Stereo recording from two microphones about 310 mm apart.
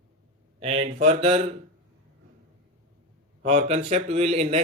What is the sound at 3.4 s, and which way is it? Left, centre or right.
Speech, right.